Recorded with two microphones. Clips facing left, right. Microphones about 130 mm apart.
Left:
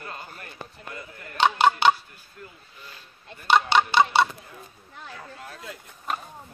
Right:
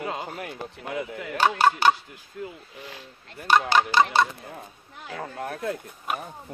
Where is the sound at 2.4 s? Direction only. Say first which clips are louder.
Right 9 dB; 70° right (ahead or behind).